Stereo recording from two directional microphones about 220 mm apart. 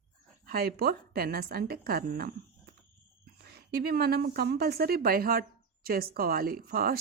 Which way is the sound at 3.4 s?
45° right (ahead or behind).